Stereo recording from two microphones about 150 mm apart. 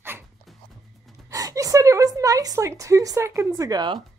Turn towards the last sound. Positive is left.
turn(degrees=-30)  # may be behind; listen again after turning